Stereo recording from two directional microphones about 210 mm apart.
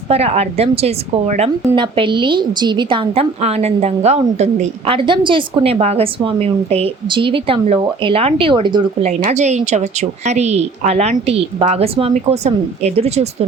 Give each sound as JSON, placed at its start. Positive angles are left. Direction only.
{"t": 0.1, "sound": "a woman's voice", "side_deg": -30}